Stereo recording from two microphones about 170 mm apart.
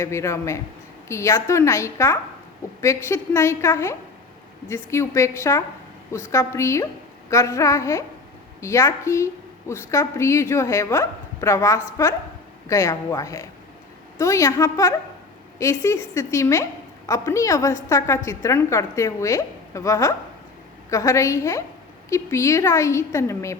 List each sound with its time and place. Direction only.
0.0 s a woman's voice: 15° left (ahead or behind)